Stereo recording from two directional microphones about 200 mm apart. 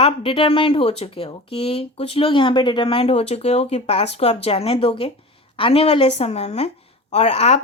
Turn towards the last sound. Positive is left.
turn(degrees=30)  # may be behind; listen again after turning